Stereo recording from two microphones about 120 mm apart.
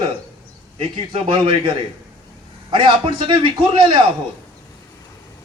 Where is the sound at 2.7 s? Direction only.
45° right (ahead or behind).